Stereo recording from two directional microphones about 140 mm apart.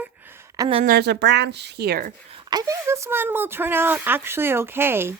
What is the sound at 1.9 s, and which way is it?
Speech, 90° right.